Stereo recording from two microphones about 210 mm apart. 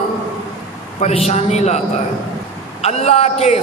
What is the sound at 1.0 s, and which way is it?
Speech, 30° left (ahead or behind).